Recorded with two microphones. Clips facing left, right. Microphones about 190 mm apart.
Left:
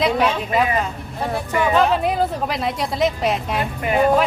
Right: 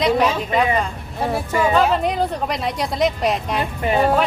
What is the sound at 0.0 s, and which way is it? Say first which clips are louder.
Speech: right 1 dB; centre (ahead or behind).